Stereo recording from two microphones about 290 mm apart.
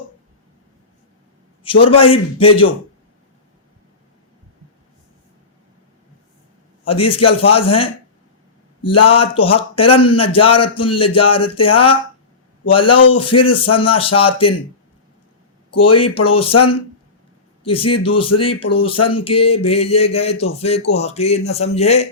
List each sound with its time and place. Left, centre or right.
1.6 s a man's voice: centre
6.8 s speech: centre
9.0 s speech: centre
15.8 s speech: centre
17.6 s speech: centre